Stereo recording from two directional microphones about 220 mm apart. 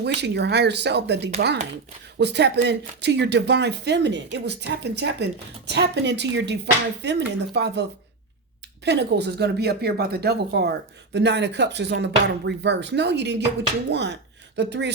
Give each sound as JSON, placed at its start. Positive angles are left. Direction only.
{"t": 0.0, "sound": "speech", "side_deg": -50}